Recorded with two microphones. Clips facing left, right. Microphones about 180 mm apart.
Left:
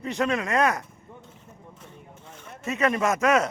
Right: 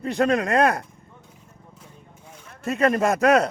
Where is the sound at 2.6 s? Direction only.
35° right (ahead or behind).